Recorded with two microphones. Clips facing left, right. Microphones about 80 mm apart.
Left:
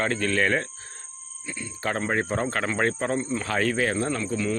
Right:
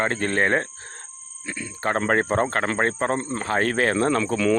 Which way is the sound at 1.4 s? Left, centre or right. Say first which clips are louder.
Right 3 dB; right.